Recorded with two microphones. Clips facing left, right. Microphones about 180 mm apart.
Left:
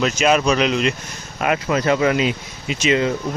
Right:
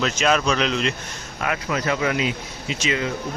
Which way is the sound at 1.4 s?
25° left (ahead or behind).